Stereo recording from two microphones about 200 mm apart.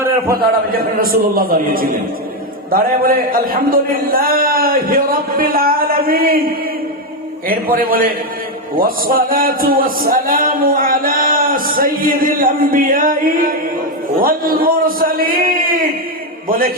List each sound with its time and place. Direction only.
0.3 s a man's voice: 45° right (ahead or behind)
7.4 s a man's voice: 45° right (ahead or behind)